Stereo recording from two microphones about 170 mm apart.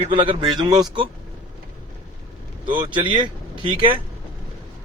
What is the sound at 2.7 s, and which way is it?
Speech, 30° right (ahead or behind).